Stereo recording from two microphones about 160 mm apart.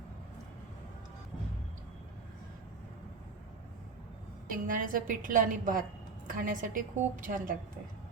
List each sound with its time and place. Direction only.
4.4 s a woman's voice: 55° right (ahead or behind)